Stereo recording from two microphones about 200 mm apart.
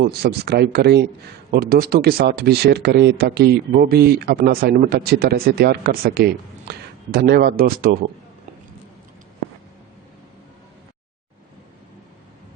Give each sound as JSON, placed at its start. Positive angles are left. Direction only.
{"t": 0.0, "sound": "speech", "side_deg": -50}